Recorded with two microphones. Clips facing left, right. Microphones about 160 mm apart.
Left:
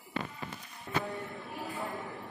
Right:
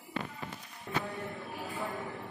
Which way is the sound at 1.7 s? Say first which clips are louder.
Right 1 dB; centre (ahead or behind).